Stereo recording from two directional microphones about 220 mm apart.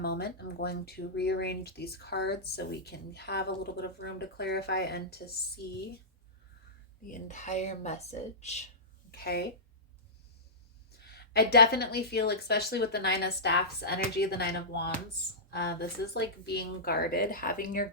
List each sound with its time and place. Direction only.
0.0 s speech: 45° left (ahead or behind)
7.1 s speech: 35° left (ahead or behind)
9.1 s speech: 45° left (ahead or behind)
11.1 s speech: 45° left (ahead or behind)